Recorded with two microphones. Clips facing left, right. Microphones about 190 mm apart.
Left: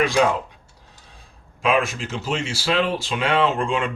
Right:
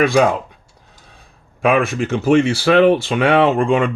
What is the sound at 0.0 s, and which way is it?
Speech, 60° right (ahead or behind).